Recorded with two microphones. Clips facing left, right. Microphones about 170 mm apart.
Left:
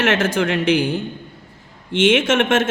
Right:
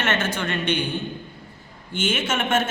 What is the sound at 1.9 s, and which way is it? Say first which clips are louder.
Speech: left 9 dB; 90° left.